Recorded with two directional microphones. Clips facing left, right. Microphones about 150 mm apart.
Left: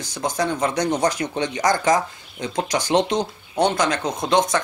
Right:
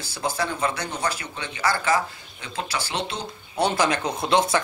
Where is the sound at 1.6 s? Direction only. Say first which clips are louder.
Left 3 dB; 15° left (ahead or behind).